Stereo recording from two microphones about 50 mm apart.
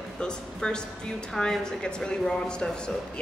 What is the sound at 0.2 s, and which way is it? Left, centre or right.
A woman's voice, centre.